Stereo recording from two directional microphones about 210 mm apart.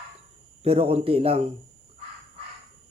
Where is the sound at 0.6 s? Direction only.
30° right (ahead or behind).